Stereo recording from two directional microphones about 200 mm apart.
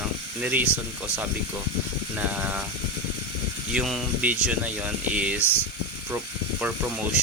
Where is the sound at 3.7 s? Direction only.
Centre (ahead or behind).